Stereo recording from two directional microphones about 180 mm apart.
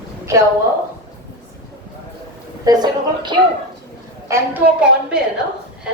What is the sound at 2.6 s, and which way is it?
Speech, 20° right (ahead or behind).